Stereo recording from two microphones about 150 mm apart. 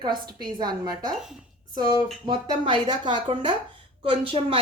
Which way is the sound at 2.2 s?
30° right (ahead or behind).